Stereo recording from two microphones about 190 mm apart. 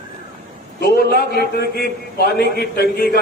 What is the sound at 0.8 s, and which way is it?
A man's voice, 55° left (ahead or behind).